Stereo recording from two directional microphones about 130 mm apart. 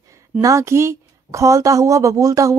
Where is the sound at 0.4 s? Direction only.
25° right (ahead or behind).